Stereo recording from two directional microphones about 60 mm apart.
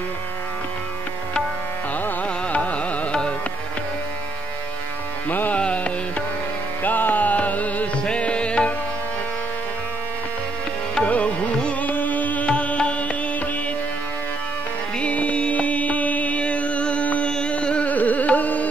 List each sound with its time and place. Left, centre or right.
2.2 s carnatic music: left
5.3 s music: left
5.6 s music: centre
6.8 s music: left
11.0 s music: centre
15.0 s music: left
17.3 s carnatic music: centre